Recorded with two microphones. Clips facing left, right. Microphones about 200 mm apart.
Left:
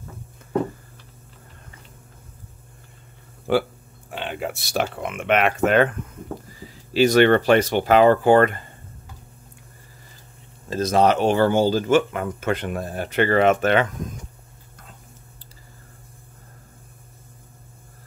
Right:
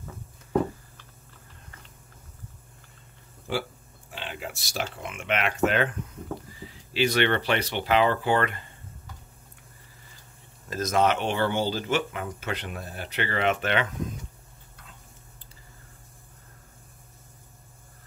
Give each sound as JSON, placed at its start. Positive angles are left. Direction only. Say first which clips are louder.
{"t": 3.5, "sound": "speech", "louder": "left 10 dB", "side_deg": 60}
{"t": 6.6, "sound": "speech", "louder": "left 8 dB", "side_deg": 40}
{"t": 10.7, "sound": "speech", "louder": "left 5 dB", "side_deg": 30}